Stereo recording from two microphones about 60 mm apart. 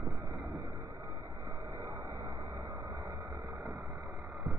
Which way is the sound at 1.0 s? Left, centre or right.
Right.